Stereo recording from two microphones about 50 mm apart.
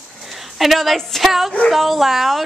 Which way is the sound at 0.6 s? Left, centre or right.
Centre.